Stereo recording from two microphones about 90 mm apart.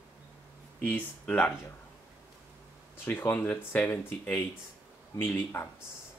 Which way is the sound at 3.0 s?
20° left (ahead or behind).